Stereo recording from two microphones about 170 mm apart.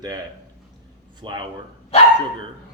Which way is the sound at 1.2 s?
25° right (ahead or behind).